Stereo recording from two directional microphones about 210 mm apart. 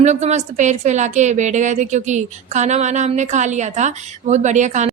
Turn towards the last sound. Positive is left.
turn(degrees=-35)  # may be behind; listen again after turning